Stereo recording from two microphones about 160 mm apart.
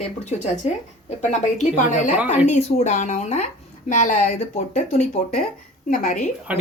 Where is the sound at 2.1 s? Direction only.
10° right (ahead or behind).